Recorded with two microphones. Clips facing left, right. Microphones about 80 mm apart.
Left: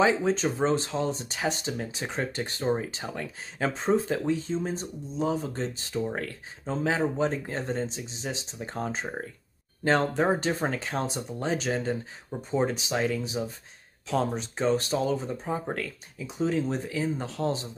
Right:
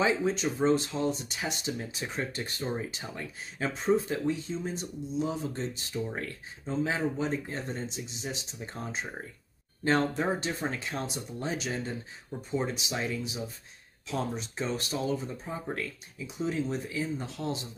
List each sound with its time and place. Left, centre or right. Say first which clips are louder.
0.0 s speech: left 4 dB; left
8.5 s speech: left 5 dB; left
10.1 s speech: left 5 dB; left